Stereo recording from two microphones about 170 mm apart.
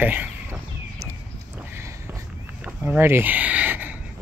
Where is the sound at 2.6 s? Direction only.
10° right (ahead or behind).